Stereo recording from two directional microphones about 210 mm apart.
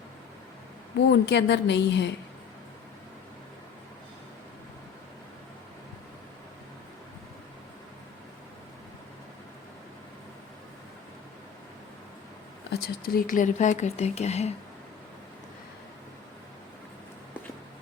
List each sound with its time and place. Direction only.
1.1 s a woman's voice: 55° left (ahead or behind)
12.7 s speech: 45° left (ahead or behind)